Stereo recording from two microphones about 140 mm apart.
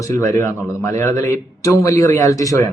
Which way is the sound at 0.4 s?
20° left (ahead or behind).